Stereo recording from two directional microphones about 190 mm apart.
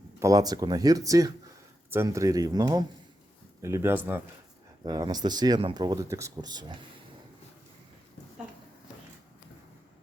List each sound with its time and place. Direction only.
0.2 s speech: 20° right (ahead or behind)